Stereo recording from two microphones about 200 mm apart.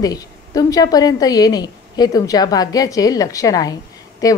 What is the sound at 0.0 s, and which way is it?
A woman's voice, 20° left (ahead or behind).